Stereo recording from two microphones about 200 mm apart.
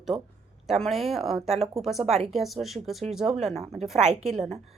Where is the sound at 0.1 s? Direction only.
15° right (ahead or behind).